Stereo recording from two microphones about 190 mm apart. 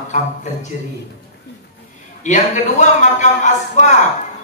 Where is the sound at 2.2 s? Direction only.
40° left (ahead or behind).